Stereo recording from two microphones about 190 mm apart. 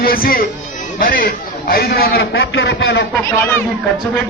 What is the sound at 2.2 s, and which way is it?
Speech, 90° left.